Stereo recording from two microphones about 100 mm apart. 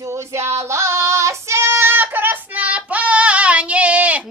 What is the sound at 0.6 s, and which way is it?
Child singing, 30° right (ahead or behind).